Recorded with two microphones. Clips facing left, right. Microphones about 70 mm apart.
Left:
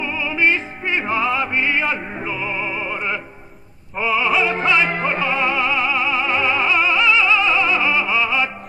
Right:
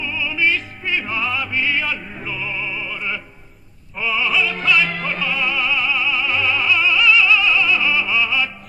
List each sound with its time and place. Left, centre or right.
0.0 s opera: left
3.9 s opera: centre
4.4 s music: left